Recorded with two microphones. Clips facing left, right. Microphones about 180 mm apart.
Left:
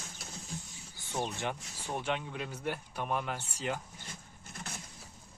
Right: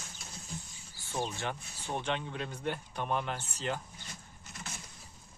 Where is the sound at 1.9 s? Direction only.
10° left (ahead or behind).